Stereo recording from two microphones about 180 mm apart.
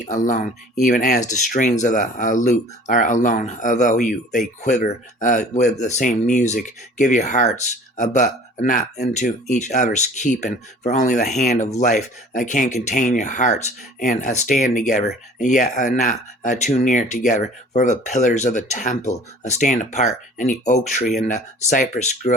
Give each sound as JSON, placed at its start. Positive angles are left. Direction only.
{"t": 0.0, "sound": "speech", "side_deg": 45}